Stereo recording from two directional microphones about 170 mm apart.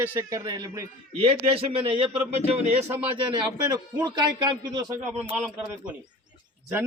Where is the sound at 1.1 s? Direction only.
35° right (ahead or behind).